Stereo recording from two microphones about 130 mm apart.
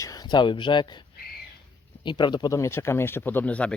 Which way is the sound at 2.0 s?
35° left (ahead or behind).